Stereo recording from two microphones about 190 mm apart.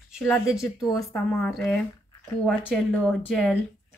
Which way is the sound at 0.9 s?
15° left (ahead or behind).